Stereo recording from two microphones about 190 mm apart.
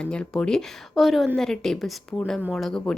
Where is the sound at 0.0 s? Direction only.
5° left (ahead or behind).